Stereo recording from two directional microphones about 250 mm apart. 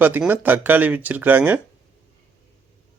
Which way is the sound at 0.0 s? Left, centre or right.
Centre.